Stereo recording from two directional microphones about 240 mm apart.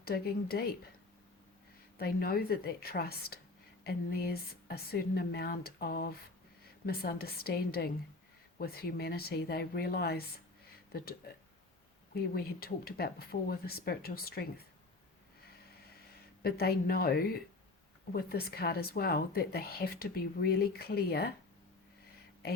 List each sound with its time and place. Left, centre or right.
0.0 s speech: left
2.0 s speech: left
12.3 s speech: left
16.4 s speech: left